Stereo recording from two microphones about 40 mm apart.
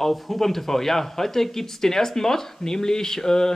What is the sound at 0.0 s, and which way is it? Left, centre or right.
A man's voice, centre.